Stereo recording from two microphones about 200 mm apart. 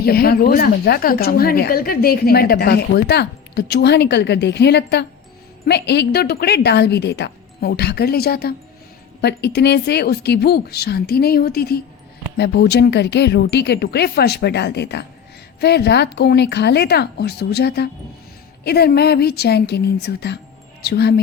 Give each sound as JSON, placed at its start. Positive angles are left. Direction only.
{"t": 0.0, "sound": "a woman's voice", "side_deg": 50}